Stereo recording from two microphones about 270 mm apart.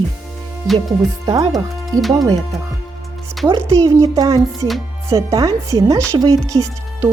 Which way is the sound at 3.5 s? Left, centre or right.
Centre.